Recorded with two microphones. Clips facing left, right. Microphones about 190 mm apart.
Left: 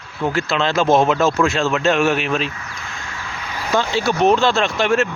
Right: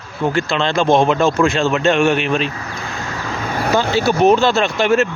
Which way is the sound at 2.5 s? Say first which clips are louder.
Right 6 dB; 40° right (ahead or behind).